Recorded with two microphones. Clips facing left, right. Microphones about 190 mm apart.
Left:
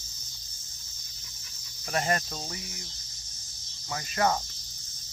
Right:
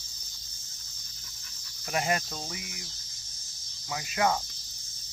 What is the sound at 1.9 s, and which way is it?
Cricket, 5° right (ahead or behind).